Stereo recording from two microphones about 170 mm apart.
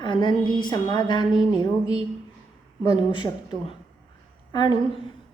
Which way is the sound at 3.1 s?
25° left (ahead or behind).